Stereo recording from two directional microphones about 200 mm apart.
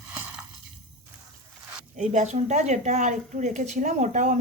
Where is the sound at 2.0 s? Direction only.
35° right (ahead or behind).